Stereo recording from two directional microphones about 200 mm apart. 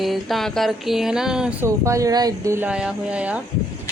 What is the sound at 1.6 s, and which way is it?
Speech, 15° right (ahead or behind).